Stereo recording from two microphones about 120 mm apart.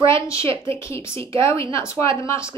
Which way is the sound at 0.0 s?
25° left (ahead or behind).